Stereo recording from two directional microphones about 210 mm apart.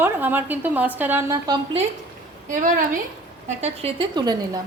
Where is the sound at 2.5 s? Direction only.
40° right (ahead or behind); by 4.6 s 20° right (ahead or behind).